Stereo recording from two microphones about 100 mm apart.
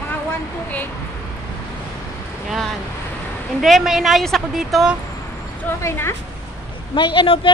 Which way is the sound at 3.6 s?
Centre (ahead or behind).